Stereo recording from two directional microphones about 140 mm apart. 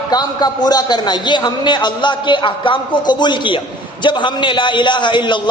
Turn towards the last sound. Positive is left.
turn(degrees=35)  # may be behind; listen again after turning